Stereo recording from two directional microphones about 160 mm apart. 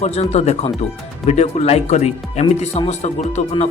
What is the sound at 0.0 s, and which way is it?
Speech, 40° left (ahead or behind).